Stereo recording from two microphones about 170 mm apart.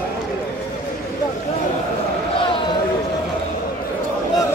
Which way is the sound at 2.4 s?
30° left (ahead or behind).